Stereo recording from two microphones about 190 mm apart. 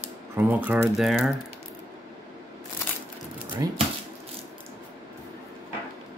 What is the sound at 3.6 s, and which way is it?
Speech, 15° right (ahead or behind).